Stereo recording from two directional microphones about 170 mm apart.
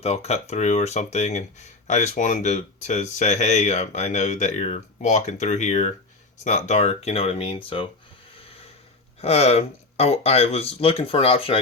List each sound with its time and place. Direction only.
0.0 s speech: 35° left (ahead or behind)
9.2 s speech: 35° left (ahead or behind)